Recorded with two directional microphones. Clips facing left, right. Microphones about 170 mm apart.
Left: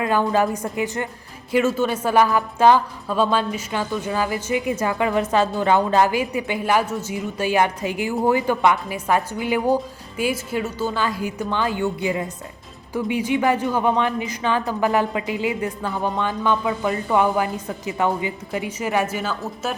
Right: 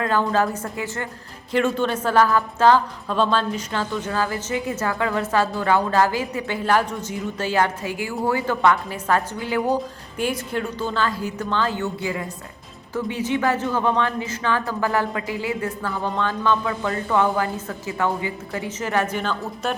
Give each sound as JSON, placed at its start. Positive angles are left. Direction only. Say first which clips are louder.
{"t": 0.0, "sound": "a woman's voice", "louder": "left 1 dB", "side_deg": 15}